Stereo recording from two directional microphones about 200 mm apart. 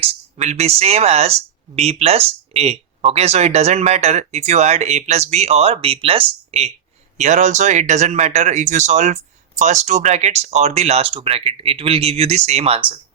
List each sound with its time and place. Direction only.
0.0 s speech: 35° right (ahead or behind)